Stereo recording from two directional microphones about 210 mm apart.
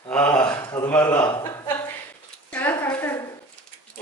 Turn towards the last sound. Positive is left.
turn(degrees=10)  # may be behind; listen again after turning